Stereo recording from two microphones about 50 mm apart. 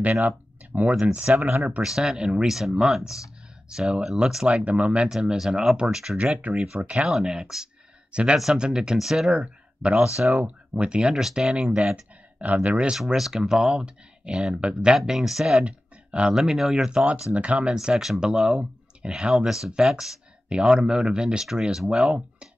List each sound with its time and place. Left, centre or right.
0.0 s speech: right
1.8 s speech: centre
4.5 s speech: right
5.4 s speech: centre
6.1 s speech: right
7.1 s speech: centre
8.9 s speech: centre
9.4 s speech: right
12.9 s speech: centre
15.0 s speech: centre
15.6 s a sound: right
16.3 s speech: centre; by 17.7 s right
17.7 s speech: centre
19.3 s speech: centre